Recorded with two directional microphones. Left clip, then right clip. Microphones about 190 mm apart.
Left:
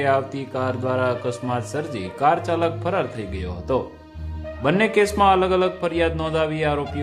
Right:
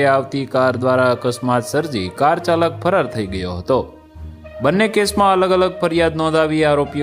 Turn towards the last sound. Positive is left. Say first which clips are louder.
# right 7 dB
turn(degrees=-40)  # may be behind; listen again after turning